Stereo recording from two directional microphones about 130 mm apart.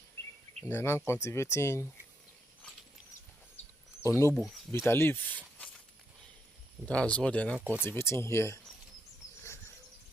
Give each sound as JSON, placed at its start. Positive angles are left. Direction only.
{"t": 0.7, "sound": "speech", "side_deg": 20}
{"t": 4.4, "sound": "speech", "side_deg": 0}
{"t": 4.7, "sound": "speech", "side_deg": 20}
{"t": 6.8, "sound": "speech", "side_deg": 10}
{"t": 7.5, "sound": "speech", "side_deg": -10}
{"t": 7.9, "sound": "speech", "side_deg": 20}